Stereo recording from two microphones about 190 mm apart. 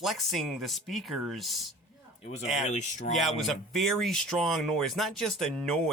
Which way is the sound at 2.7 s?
40° left (ahead or behind).